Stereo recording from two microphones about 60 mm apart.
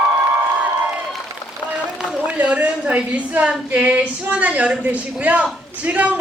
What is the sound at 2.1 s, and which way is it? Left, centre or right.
Speech, right.